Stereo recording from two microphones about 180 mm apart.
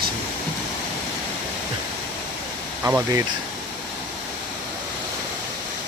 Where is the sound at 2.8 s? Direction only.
15° right (ahead or behind).